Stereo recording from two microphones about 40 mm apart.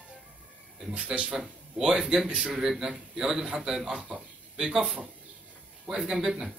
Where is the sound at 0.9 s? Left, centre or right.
Right.